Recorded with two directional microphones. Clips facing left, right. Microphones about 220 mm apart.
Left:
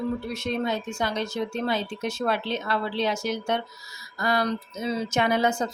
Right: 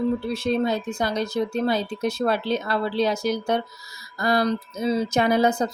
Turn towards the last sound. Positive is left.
turn(degrees=-35)  # may be behind; listen again after turning